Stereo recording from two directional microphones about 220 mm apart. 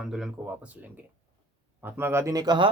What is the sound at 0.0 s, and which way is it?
Speech, centre (ahead or behind).